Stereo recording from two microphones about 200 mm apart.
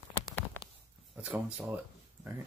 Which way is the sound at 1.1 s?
5° right (ahead or behind).